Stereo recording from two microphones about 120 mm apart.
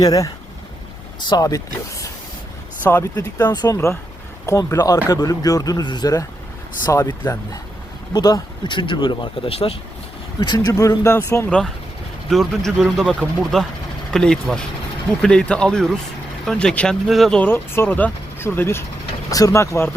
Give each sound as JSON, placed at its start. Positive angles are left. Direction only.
{"t": 0.0, "sound": "speech", "side_deg": 30}
{"t": 1.3, "sound": "speech", "side_deg": 30}
{"t": 3.5, "sound": "speech", "side_deg": 30}
{"t": 6.9, "sound": "speech", "side_deg": 20}
{"t": 8.1, "sound": "speech", "side_deg": 35}
{"t": 10.7, "sound": "speech", "side_deg": 25}
{"t": 11.4, "sound": "speech", "side_deg": 5}
{"t": 17.4, "sound": "speech", "side_deg": 15}